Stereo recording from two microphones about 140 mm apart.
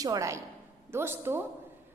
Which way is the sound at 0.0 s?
25° right (ahead or behind).